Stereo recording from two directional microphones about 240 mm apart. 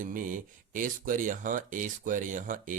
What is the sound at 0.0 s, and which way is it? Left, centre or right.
Speech, right.